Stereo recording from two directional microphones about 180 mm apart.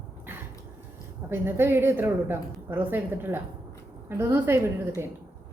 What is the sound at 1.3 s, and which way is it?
A woman's voice, 10° right (ahead or behind).